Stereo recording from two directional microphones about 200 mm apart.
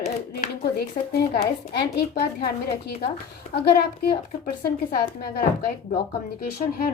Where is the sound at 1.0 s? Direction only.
25° left (ahead or behind).